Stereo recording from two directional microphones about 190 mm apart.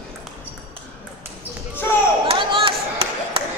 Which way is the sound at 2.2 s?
25° right (ahead or behind).